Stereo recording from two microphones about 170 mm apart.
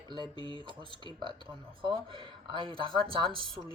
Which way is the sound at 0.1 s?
30° right (ahead or behind).